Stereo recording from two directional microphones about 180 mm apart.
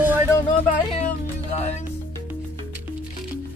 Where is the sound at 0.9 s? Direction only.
40° left (ahead or behind).